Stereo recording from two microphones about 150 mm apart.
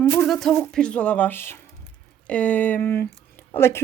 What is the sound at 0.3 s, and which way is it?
Speech, centre (ahead or behind).